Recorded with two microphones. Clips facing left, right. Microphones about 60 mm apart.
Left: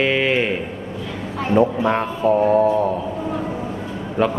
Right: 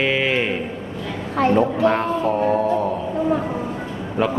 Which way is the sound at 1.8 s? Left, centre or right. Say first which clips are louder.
Even; centre.